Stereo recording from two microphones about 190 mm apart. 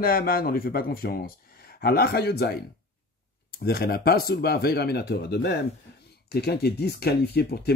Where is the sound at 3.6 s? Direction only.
55° left (ahead or behind).